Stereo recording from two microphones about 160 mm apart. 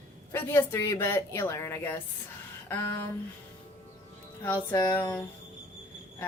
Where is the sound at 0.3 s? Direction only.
15° left (ahead or behind).